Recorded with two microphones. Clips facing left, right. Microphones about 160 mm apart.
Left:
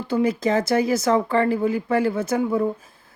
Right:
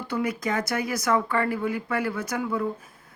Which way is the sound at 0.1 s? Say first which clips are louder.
Left 7 dB; 30° left (ahead or behind).